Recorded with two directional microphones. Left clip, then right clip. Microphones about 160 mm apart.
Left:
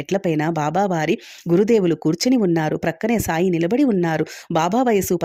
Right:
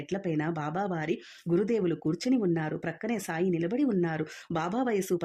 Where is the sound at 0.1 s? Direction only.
40° left (ahead or behind).